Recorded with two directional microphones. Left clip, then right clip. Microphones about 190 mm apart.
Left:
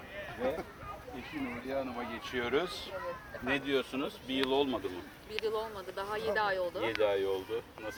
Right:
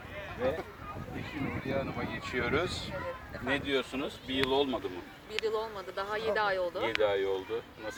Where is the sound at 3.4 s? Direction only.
15° right (ahead or behind).